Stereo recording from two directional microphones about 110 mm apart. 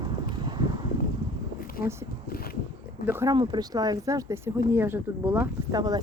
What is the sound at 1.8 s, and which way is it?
Speech, 25° right (ahead or behind).